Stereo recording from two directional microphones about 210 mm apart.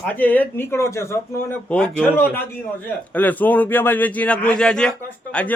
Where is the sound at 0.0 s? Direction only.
10° left (ahead or behind).